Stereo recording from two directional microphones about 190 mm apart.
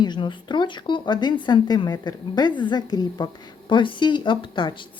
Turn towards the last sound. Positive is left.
turn(degrees=25)  # may be behind; listen again after turning